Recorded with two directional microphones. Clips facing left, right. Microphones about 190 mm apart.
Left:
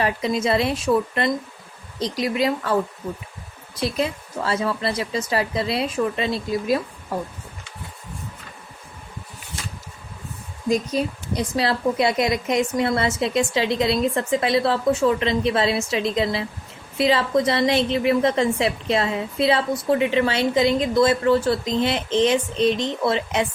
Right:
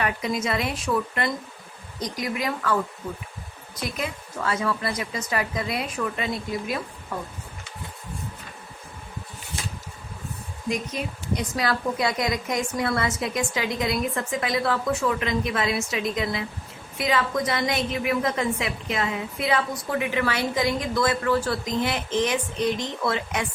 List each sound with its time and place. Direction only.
0.0 s a woman's voice: 25° left (ahead or behind)
3.8 s a woman's voice: 30° left (ahead or behind)
10.7 s a woman's voice: 35° left (ahead or behind)